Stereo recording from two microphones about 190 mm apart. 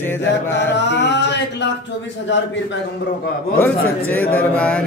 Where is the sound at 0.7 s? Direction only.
65° left (ahead or behind).